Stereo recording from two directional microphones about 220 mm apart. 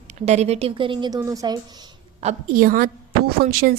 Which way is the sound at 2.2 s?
35° right (ahead or behind).